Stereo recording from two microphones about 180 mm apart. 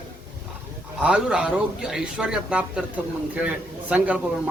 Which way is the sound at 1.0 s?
5° right (ahead or behind).